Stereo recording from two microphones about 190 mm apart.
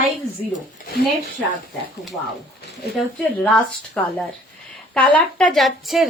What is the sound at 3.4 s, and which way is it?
Speech, 5° left (ahead or behind).